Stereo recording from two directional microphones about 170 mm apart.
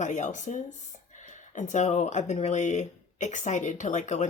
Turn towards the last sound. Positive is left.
turn(degrees=45)  # may be behind; listen again after turning